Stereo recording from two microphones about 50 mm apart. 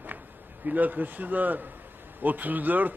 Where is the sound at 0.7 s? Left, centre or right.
Right.